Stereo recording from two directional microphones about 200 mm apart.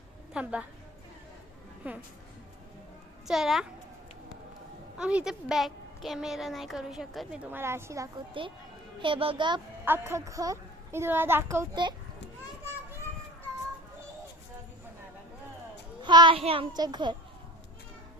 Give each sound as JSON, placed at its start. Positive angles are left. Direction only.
{"t": 0.4, "sound": "a woman's voice", "side_deg": -5}
{"t": 1.8, "sound": "a woman's voice", "side_deg": -10}
{"t": 3.2, "sound": "a woman's voice", "side_deg": 0}
{"t": 4.9, "sound": "a woman's voice", "side_deg": -5}
{"t": 9.8, "sound": "a woman's voice", "side_deg": -10}
{"t": 16.0, "sound": "a child's voice", "side_deg": -25}